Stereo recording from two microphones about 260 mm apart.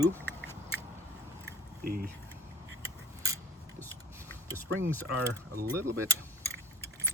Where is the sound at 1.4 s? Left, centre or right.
Right.